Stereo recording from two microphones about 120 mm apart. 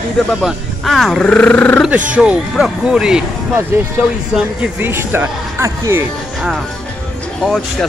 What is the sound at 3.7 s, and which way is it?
Speech, 20° right (ahead or behind).